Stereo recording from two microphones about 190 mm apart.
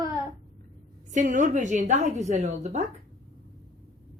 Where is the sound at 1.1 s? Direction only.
40° right (ahead or behind).